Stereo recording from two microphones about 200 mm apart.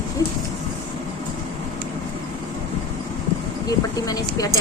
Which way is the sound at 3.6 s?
20° left (ahead or behind).